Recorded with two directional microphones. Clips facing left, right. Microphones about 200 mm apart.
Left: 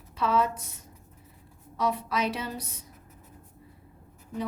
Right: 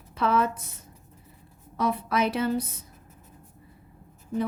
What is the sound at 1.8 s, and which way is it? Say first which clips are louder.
Speech: right 3 dB; 55° right (ahead or behind).